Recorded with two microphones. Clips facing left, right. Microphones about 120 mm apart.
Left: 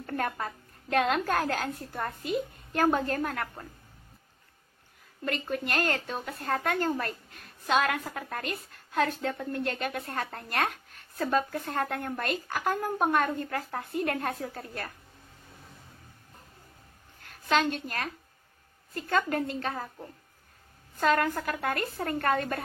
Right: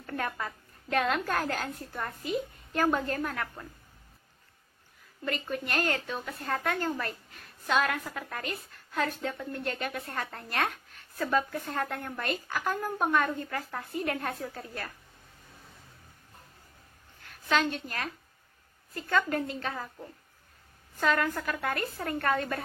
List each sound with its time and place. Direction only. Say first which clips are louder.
0.0 s a woman's voice: left 2 dB; 40° left (ahead or behind)
5.2 s a woman's voice: left 2 dB; 40° left (ahead or behind)
7.8 s a woman's voice: left 1 dB; 50° left (ahead or behind)
17.5 s a woman's voice: left 2 dB; 45° left (ahead or behind)
21.0 s a woman's voice: left 2 dB; 45° left (ahead or behind)